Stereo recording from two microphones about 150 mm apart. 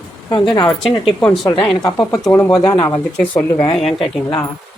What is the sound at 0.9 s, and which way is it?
Speech, 35° left (ahead or behind).